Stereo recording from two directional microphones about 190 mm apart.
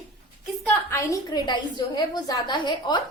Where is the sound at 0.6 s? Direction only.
10° left (ahead or behind).